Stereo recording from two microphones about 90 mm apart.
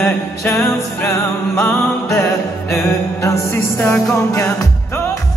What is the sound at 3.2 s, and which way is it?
Music, 35° left (ahead or behind).